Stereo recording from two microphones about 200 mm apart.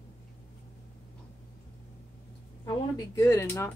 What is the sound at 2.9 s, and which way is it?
Speech, 15° left (ahead or behind).